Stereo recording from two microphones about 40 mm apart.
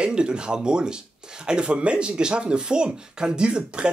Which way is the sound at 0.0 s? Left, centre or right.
Right.